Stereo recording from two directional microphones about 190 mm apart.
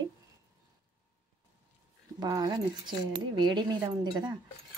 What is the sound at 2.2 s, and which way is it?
Speech, 20° right (ahead or behind).